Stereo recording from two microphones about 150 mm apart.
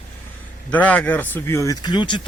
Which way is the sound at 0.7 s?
10° left (ahead or behind).